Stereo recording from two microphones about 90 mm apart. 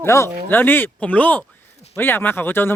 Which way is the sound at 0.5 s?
20° left (ahead or behind).